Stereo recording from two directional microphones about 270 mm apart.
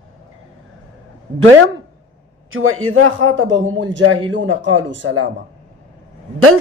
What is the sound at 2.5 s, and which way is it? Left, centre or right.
A man's voice, right.